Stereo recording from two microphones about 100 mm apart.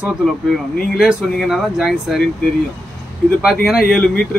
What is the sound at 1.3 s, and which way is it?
Speech, 5° right (ahead or behind).